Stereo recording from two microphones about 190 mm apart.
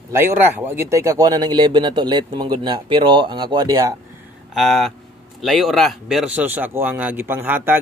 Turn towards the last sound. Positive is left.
turn(degrees=-10)  # may be behind; listen again after turning